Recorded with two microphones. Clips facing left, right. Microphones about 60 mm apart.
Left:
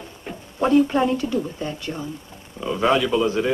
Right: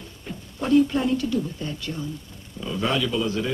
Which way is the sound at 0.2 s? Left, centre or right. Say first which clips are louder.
Left 8 dB; left.